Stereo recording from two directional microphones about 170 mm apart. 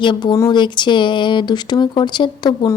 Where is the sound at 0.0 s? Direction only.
25° left (ahead or behind).